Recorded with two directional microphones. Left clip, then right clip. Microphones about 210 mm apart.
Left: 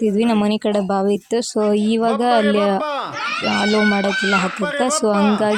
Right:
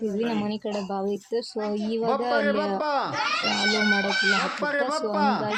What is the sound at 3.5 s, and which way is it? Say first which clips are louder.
Speech: left 7 dB; 50° left (ahead or behind).